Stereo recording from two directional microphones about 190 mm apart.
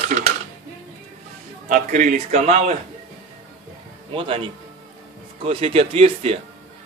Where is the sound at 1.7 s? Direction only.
40° right (ahead or behind).